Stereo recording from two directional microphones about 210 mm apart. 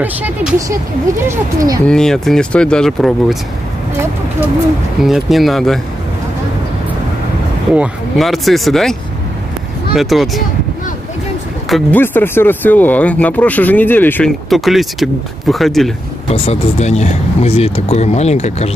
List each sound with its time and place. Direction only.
0.0 s speech: 5° right (ahead or behind)
1.9 s speech: 5° left (ahead or behind)
5.0 s speech: centre (ahead or behind)
7.7 s speech: 5° right (ahead or behind)
9.9 s speech: centre (ahead or behind)
11.7 s speech: 10° left (ahead or behind)
16.3 s speech: 30° left (ahead or behind)